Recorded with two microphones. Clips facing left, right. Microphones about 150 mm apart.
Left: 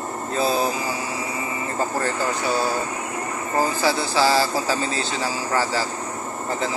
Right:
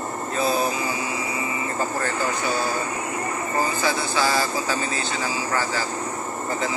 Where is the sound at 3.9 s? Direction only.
30° left (ahead or behind).